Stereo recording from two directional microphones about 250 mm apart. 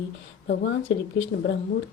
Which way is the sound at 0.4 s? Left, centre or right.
Left.